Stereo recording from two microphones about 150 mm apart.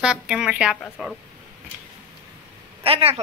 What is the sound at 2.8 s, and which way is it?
Speech, 40° right (ahead or behind).